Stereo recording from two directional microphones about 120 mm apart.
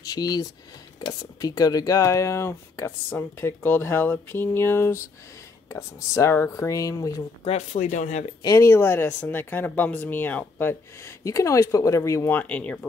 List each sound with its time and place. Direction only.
0.0 s speech: 35° left (ahead or behind)
7.4 s speech: 80° left
8.4 s speech: 25° left (ahead or behind)